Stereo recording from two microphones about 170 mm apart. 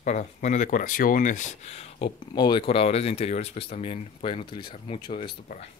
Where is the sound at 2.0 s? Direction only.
25° left (ahead or behind).